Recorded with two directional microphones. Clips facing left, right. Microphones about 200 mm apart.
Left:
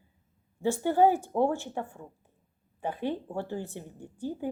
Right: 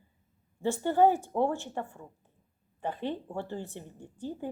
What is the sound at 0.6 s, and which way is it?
Speech, 10° left (ahead or behind).